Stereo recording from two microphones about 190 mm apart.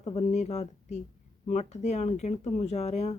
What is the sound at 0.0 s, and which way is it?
Speech, 35° left (ahead or behind).